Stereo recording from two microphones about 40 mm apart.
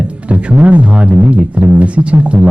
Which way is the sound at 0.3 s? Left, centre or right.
Right.